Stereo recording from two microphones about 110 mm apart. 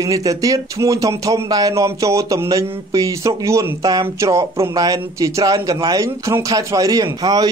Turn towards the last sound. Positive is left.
turn(degrees=-35)  # may be behind; listen again after turning